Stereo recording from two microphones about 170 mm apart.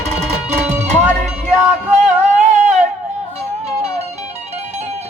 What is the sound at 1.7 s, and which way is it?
Music, 45° right (ahead or behind).